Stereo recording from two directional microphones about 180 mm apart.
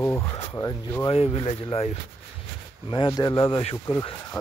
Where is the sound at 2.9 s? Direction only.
25° left (ahead or behind).